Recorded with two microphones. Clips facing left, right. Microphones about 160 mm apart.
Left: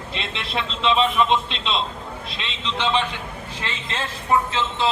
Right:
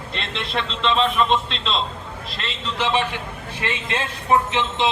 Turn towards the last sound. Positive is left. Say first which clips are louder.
# right 1 dB
turn(degrees=-20)  # may be behind; listen again after turning